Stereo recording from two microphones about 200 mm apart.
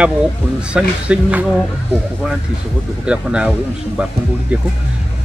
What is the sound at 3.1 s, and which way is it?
Speech, 5° right (ahead or behind).